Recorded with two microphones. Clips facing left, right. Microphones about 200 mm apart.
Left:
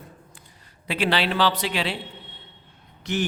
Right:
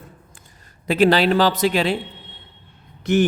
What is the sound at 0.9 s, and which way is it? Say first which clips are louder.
Speech: right 8 dB; 45° right (ahead or behind).